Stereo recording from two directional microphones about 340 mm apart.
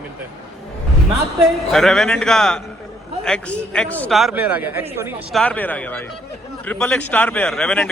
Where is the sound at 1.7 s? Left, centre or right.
Centre.